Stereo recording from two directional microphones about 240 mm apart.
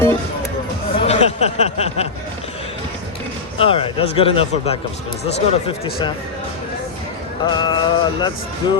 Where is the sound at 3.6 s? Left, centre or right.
Left.